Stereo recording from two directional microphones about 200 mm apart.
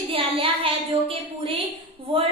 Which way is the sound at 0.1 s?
25° right (ahead or behind).